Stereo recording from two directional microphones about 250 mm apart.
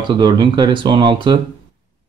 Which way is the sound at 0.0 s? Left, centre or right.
Centre.